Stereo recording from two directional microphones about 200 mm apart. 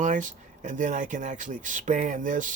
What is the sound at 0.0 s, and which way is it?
Speech, 40° right (ahead or behind).